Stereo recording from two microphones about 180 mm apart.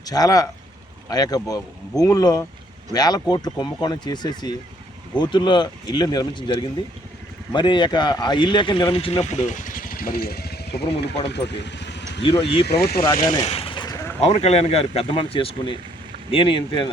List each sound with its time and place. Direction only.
0.0 s speech: 20° left (ahead or behind); by 12.0 s 75° left (ahead or behind)
12.2 s speech: 30° left (ahead or behind)
12.6 s speech: 60° left (ahead or behind)
13.4 s a sound: 35° left (ahead or behind); by 14.2 s 15° left (ahead or behind)
14.2 s speech: 35° left (ahead or behind)